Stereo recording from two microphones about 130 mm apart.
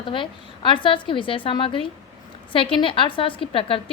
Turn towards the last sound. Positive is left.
turn(degrees=45)  # may be behind; listen again after turning